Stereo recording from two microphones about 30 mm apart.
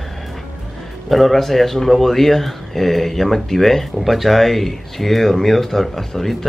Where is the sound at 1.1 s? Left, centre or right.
Centre.